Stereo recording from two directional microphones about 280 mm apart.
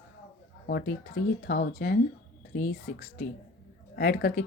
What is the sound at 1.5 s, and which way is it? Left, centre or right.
Speech, left.